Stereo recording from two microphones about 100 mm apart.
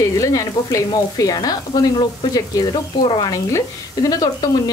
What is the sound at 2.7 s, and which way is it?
Speech, 50° left (ahead or behind).